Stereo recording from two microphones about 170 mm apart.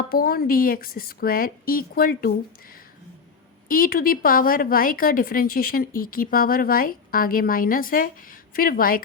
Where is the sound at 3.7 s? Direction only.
60° left (ahead or behind).